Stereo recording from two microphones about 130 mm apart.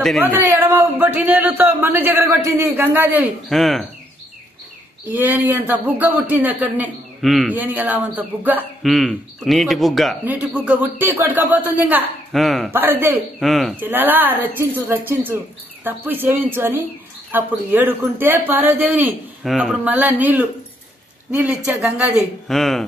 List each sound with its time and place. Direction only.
0.2 s a man's voice: 15° right (ahead or behind)
3.4 s a man's voice: centre (ahead or behind)
5.1 s a man's voice: 15° right (ahead or behind)
7.2 s a man's voice: centre (ahead or behind)
7.5 s a man's voice: 15° right (ahead or behind)
8.8 s a man's voice: centre (ahead or behind)
10.2 s a man's voice: 10° right (ahead or behind)
12.3 s a man's voice: centre (ahead or behind)
12.7 s a man's voice: 15° right (ahead or behind)
13.4 s a man's voice: centre (ahead or behind)
13.7 s a man's voice: 15° right (ahead or behind)
19.0 s a man's voice: centre (ahead or behind)
19.8 s a man's voice: 10° right (ahead or behind)
22.5 s a man's voice: centre (ahead or behind)